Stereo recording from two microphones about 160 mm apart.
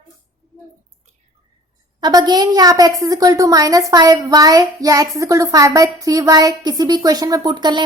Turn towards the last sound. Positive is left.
turn(degrees=-30)  # may be behind; listen again after turning